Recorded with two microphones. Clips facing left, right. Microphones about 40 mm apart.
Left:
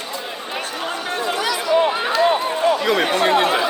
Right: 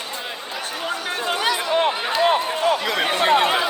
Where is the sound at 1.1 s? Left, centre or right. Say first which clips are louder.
Even; right.